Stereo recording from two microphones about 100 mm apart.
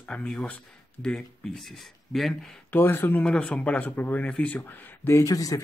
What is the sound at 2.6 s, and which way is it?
Speech, 20° left (ahead or behind).